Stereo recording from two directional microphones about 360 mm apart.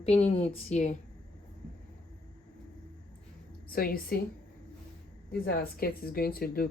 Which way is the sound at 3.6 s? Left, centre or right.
Left.